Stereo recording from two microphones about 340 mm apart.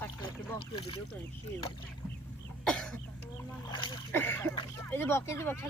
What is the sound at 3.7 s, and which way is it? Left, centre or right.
Speech, centre.